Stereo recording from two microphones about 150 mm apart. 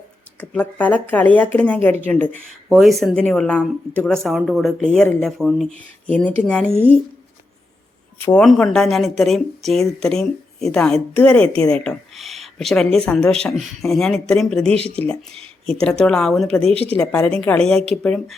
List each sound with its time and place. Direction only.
0.3 s speech: 10° left (ahead or behind)
2.6 s speech: centre (ahead or behind)
6.7 s a woman's voice: 15° right (ahead or behind)
8.2 s speech: 5° left (ahead or behind)